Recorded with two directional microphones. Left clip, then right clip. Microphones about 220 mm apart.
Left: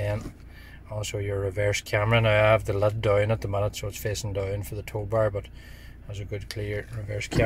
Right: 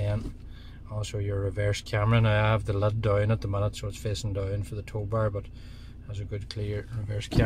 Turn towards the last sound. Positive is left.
turn(degrees=5)  # may be behind; listen again after turning